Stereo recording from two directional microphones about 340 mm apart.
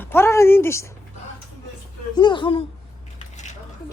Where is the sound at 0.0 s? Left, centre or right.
Centre.